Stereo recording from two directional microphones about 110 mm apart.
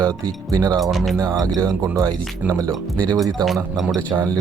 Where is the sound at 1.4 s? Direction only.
35° right (ahead or behind).